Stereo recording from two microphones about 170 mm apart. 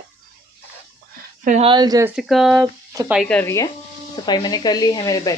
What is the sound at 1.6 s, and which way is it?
Speech, 25° right (ahead or behind).